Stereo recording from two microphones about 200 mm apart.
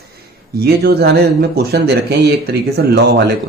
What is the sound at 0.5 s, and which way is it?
Speech, 50° right (ahead or behind).